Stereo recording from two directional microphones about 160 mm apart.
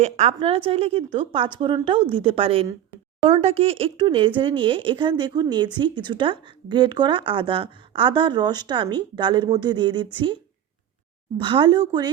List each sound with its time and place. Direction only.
0.0 s a woman's voice: 40° right (ahead or behind)
11.3 s speech: 30° right (ahead or behind)